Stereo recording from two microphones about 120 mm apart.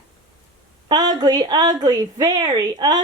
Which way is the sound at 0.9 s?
35° right (ahead or behind).